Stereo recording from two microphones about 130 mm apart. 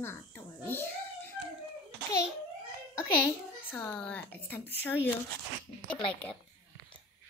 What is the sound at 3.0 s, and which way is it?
A child's voice, 15° left (ahead or behind).